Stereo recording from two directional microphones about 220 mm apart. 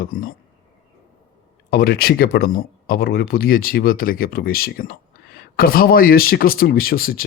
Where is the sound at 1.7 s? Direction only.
45° left (ahead or behind).